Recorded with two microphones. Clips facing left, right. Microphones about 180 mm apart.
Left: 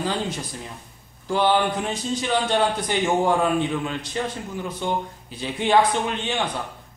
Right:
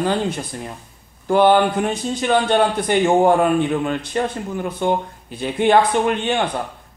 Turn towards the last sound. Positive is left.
turn(degrees=-55)  # may be behind; listen again after turning